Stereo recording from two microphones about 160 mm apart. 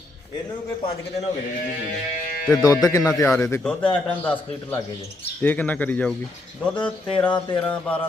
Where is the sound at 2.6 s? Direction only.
20° left (ahead or behind).